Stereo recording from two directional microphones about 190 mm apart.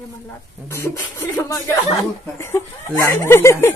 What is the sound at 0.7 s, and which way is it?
Speech, 10° left (ahead or behind).